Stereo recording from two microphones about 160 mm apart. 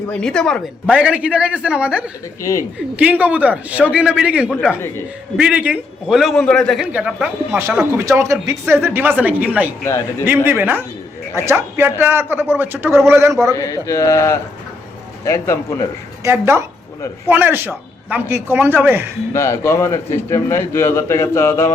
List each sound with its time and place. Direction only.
0.1 s a man's voice: 5° left (ahead or behind)
0.9 s a man's voice: 5° right (ahead or behind)
2.4 s mantra: 20° left (ahead or behind)
2.9 s a man's voice: 10° right (ahead or behind)
6.9 s a man's voice: 10° right (ahead or behind)
9.8 s a man's voice: 15° left (ahead or behind)
10.2 s a man's voice: 10° right (ahead or behind)
13.5 s mantra: 20° left (ahead or behind)
16.2 s a man's voice: 15° right (ahead or behind)
19.3 s a man's voice: 15° left (ahead or behind)